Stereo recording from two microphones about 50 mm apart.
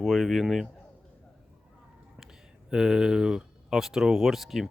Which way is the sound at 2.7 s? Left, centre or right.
Centre.